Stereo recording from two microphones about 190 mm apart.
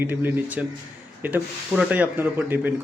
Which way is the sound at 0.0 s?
10° right (ahead or behind).